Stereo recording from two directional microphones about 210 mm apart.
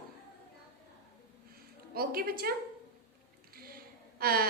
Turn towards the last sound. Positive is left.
turn(degrees=-45)  # may be behind; listen again after turning